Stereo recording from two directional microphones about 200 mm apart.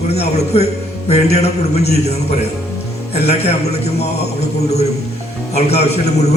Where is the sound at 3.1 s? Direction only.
30° left (ahead or behind).